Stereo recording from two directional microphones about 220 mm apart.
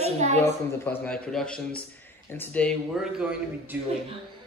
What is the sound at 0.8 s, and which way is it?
A man's voice, 5° left (ahead or behind).